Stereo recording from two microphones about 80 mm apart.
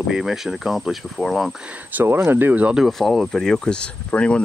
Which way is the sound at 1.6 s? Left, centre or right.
Centre.